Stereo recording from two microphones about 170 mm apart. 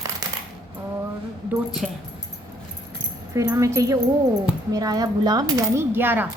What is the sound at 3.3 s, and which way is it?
Coin, 20° right (ahead or behind).